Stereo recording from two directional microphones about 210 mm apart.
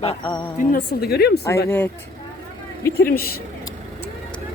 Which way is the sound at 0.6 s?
45° left (ahead or behind).